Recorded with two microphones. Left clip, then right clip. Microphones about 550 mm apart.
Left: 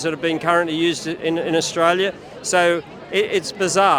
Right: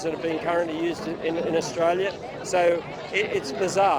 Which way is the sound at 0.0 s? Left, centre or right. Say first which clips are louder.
Left 6 dB; left.